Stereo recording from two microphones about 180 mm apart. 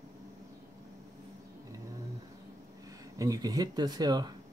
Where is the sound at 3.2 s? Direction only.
20° right (ahead or behind).